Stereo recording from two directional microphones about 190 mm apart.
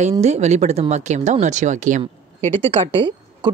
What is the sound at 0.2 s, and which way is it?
Speech, 35° right (ahead or behind).